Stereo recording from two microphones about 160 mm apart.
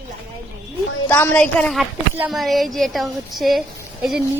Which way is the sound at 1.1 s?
10° left (ahead or behind).